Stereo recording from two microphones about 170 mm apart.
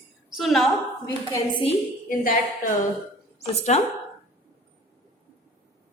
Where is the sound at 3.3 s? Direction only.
40° left (ahead or behind).